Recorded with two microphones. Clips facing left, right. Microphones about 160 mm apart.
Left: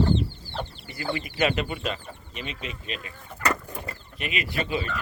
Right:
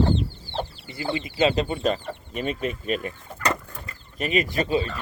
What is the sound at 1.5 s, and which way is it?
Speech, 30° right (ahead or behind).